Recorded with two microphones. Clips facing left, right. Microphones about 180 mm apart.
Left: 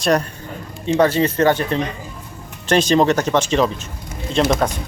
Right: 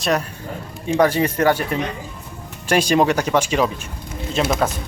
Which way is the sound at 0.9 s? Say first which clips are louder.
Left 1 dB; 10° right (ahead or behind).